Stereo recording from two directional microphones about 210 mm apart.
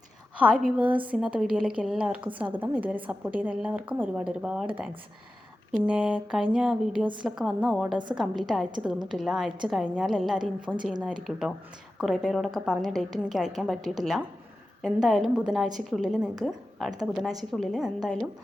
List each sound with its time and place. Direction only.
0.3 s a woman's voice: 5° right (ahead or behind)
0.9 s a woman's voice: 25° right (ahead or behind)
1.1 s a woman's voice: 5° right (ahead or behind)
5.7 s a woman's voice: 5° right (ahead or behind)